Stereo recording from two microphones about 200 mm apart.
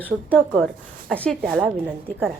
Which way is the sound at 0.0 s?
5° left (ahead or behind).